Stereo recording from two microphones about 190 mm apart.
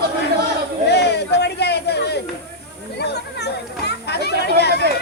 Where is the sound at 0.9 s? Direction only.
60° left (ahead or behind).